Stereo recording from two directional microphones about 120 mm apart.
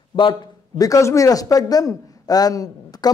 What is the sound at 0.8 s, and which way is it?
A man's voice, 25° left (ahead or behind).